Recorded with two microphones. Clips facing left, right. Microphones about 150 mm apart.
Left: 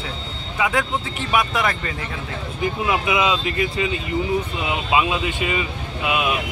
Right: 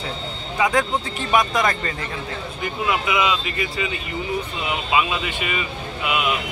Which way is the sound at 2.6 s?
20° left (ahead or behind).